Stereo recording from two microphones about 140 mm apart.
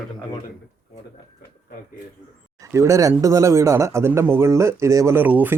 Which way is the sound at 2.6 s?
20° right (ahead or behind).